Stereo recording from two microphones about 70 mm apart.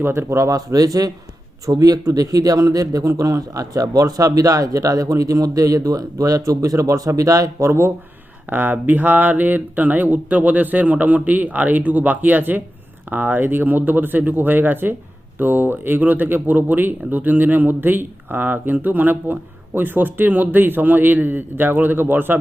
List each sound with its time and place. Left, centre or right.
0.0 s speech: right
7.7 s speech: right
8.4 s speech: right